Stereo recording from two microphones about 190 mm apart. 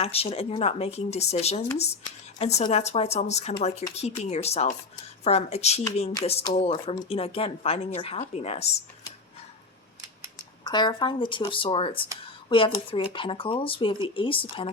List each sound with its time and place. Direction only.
0.0 s speech: 30° left (ahead or behind)
10.6 s speech: 20° left (ahead or behind)